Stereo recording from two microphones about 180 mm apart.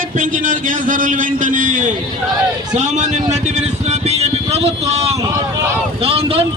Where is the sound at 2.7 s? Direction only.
40° right (ahead or behind).